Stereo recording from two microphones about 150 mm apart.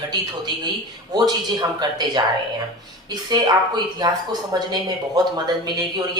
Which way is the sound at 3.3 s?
30° right (ahead or behind).